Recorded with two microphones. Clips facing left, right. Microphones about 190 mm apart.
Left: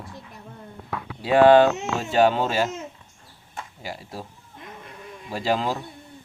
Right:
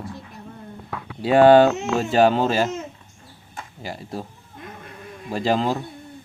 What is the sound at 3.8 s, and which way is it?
Speech, 5° left (ahead or behind).